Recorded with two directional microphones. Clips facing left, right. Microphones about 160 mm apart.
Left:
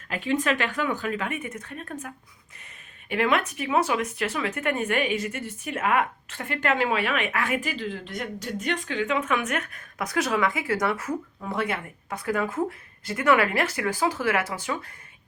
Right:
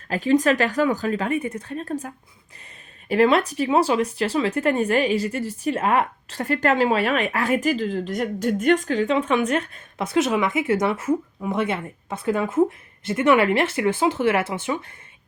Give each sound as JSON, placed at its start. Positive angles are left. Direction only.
{"t": 0.1, "sound": "speech", "side_deg": -40}